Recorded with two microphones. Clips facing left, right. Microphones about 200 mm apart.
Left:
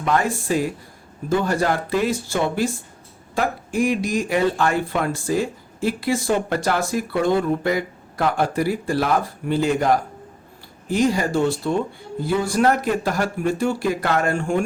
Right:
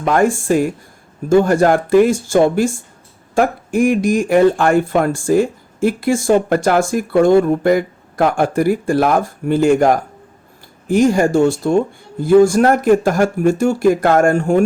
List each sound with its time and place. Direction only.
0.0 s speech: 50° right (ahead or behind)